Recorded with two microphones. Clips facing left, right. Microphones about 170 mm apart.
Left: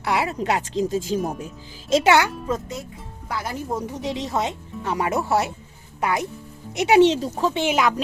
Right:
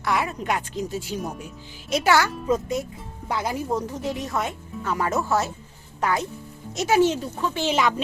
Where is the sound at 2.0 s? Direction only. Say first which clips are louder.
Left 1 dB; 20° left (ahead or behind).